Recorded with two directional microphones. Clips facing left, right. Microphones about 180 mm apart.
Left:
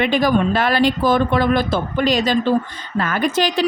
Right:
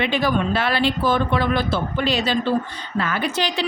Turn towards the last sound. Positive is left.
turn(degrees=45)  # may be behind; listen again after turning